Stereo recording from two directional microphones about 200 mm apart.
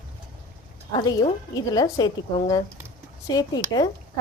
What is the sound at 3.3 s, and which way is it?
Speech, 20° left (ahead or behind).